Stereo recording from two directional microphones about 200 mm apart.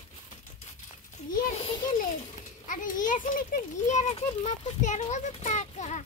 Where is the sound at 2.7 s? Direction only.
40° left (ahead or behind).